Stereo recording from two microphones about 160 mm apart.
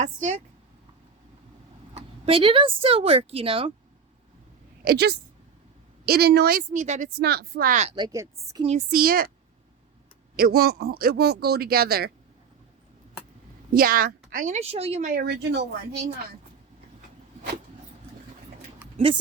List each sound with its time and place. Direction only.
0.0 s a woman's voice: 50° right (ahead or behind)
1.9 s speech: 35° right (ahead or behind)
4.9 s speech: 90° right
6.1 s speech: 80° right; by 7.1 s 50° right (ahead or behind)
7.2 s speech: 85° right
7.9 s speech: 25° right (ahead or behind)
8.9 s speech: 65° right (ahead or behind)
10.3 s speech: 70° right (ahead or behind)
13.7 s a woman's voice: 65° right (ahead or behind); by 15.1 s 40° right (ahead or behind)
15.1 s speech: 85° right
18.9 s speech: 35° right (ahead or behind)